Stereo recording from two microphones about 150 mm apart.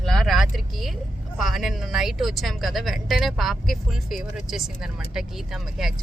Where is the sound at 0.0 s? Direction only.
5° left (ahead or behind).